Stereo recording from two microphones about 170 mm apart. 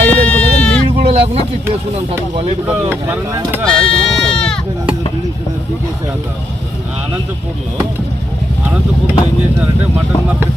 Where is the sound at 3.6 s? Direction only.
5° left (ahead or behind).